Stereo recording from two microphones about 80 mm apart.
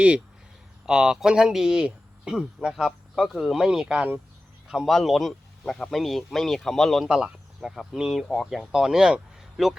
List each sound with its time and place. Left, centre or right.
0.9 s speech: centre
4.9 s speech: centre
7.1 s speech: centre